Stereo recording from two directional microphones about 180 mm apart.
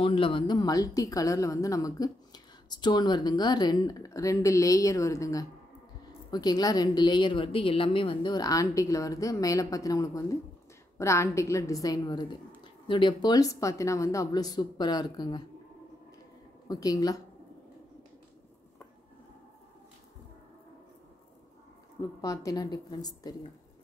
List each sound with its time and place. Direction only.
0.0 s a woman's voice: 30° left (ahead or behind)
16.6 s a woman's voice: 20° left (ahead or behind)
22.2 s a woman's voice: 20° left (ahead or behind)